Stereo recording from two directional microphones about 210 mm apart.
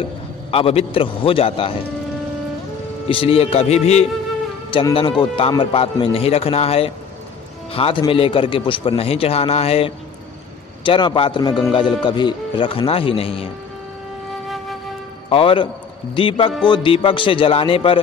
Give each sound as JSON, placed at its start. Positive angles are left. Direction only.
{"t": 0.5, "sound": "a man's voice", "side_deg": 25}
{"t": 3.1, "sound": "a man's voice", "side_deg": 25}
{"t": 15.2, "sound": "a man's voice", "side_deg": 25}